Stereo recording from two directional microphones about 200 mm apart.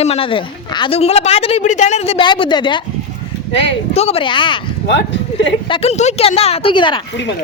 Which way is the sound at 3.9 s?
30° left (ahead or behind).